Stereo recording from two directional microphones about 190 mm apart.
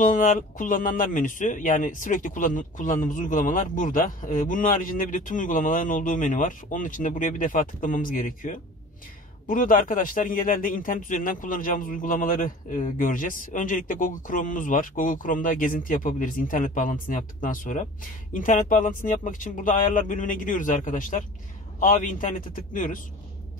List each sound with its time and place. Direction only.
0.0 s speech: 45° left (ahead or behind)